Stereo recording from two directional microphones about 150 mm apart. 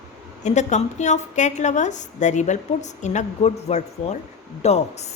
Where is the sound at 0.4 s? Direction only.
50° left (ahead or behind).